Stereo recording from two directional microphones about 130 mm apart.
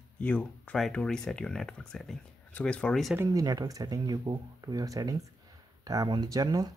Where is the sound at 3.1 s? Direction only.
20° right (ahead or behind).